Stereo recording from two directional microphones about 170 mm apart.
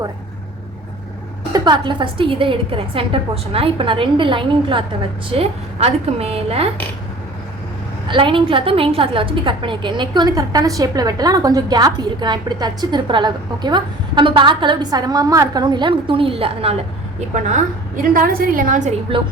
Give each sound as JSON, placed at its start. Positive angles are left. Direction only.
{"t": 1.5, "sound": "a woman's voice", "side_deg": -25}
{"t": 8.0, "sound": "a woman's voice", "side_deg": -30}
{"t": 17.2, "sound": "a woman's voice", "side_deg": -45}
{"t": 18.1, "sound": "a woman's voice", "side_deg": -60}